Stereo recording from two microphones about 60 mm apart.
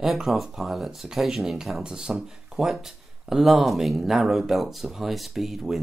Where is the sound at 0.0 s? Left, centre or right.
Centre.